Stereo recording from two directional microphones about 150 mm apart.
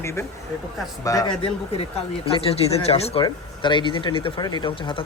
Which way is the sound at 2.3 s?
40° left (ahead or behind).